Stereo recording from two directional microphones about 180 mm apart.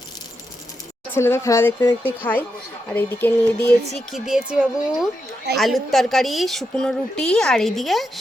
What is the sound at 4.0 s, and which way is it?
A woman's voice, centre (ahead or behind).